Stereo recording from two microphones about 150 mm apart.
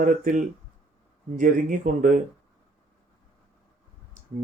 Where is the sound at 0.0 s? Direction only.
60° right (ahead or behind).